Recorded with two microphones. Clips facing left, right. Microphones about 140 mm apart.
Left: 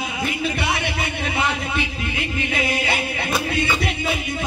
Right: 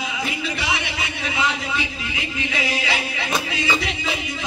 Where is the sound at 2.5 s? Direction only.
50° left (ahead or behind).